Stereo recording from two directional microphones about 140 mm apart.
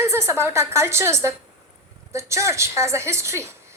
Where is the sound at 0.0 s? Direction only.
20° right (ahead or behind).